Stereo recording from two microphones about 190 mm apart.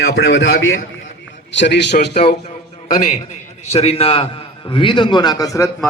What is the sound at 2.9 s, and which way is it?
Speech, 45° left (ahead or behind).